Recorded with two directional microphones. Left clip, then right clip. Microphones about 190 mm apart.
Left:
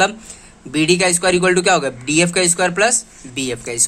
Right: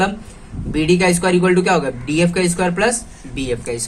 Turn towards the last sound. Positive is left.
turn(degrees=45)  # may be behind; listen again after turning